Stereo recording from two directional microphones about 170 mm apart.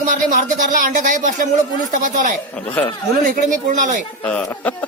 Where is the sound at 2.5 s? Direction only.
10° left (ahead or behind).